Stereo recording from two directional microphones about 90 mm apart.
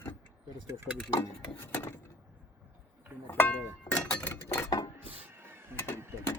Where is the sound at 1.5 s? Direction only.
25° left (ahead or behind).